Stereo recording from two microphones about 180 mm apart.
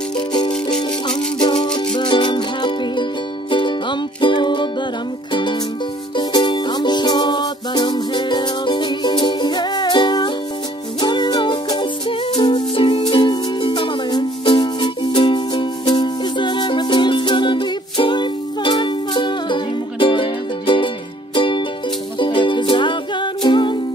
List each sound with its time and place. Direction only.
0.7 s music: 25° left (ahead or behind)